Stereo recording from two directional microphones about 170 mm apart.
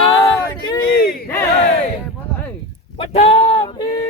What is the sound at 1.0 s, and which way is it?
Battle cry, 65° left (ahead or behind).